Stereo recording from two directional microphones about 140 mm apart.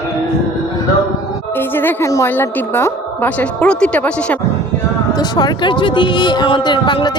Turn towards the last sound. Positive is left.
turn(degrees=35)  # may be behind; listen again after turning